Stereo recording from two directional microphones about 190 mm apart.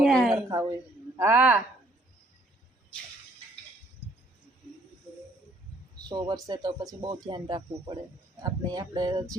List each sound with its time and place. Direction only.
0.0 s a sound: centre (ahead or behind)
1.1 s a woman's voice: 10° right (ahead or behind)
6.0 s a man's voice: 20° right (ahead or behind)